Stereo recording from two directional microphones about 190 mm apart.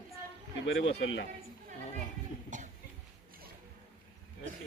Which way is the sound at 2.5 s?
40° right (ahead or behind).